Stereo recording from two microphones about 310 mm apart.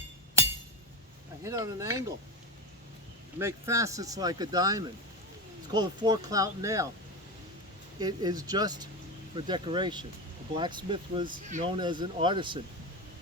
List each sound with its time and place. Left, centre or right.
1.5 s speech: centre
3.3 s speech: centre
7.9 s speech: centre